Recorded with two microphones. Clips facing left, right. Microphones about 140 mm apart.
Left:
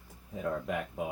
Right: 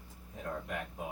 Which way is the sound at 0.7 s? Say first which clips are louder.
Left 5 dB; 90° left.